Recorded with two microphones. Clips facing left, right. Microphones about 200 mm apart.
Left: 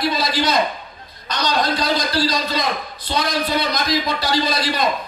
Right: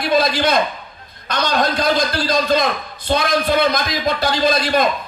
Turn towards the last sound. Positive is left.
turn(degrees=-50)  # may be behind; listen again after turning